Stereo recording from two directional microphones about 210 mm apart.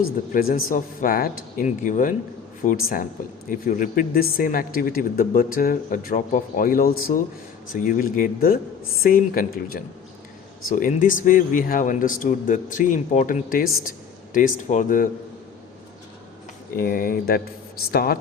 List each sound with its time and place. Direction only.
0.3 s speech: 40° left (ahead or behind)
16.7 s speech: 45° left (ahead or behind)